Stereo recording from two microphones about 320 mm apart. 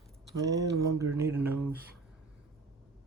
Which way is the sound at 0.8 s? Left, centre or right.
Centre.